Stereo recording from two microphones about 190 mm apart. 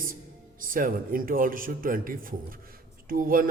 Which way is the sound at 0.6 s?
45° right (ahead or behind).